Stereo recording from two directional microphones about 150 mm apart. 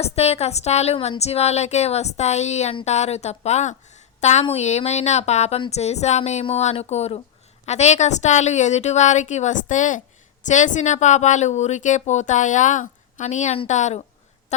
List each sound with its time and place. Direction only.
0.0 s a woman's voice: 45° left (ahead or behind)